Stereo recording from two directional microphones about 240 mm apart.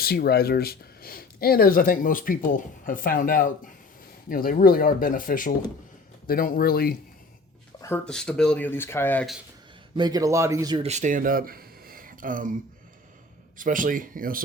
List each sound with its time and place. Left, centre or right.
0.0 s speech: left
7.8 s speech: centre
10.0 s a man's voice: centre
10.8 s speech: right
13.6 s speech: right